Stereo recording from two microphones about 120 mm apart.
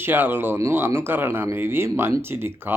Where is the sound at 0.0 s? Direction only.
20° right (ahead or behind).